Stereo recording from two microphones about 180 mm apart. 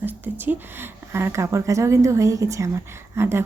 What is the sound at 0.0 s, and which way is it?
Speech, 10° right (ahead or behind).